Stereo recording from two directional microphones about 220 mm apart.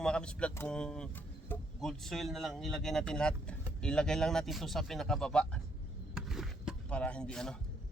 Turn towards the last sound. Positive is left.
turn(degrees=5)  # may be behind; listen again after turning